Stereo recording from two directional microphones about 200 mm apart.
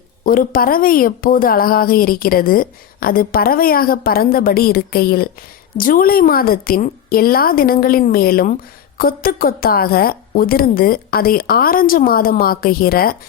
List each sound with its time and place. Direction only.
0.3 s a woman's voice: 45° left (ahead or behind)